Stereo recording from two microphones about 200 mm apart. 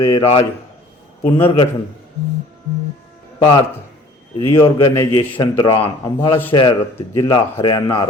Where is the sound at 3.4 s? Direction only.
20° left (ahead or behind).